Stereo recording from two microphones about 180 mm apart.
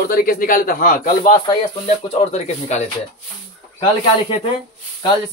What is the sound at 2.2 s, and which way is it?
Speech, 40° left (ahead or behind).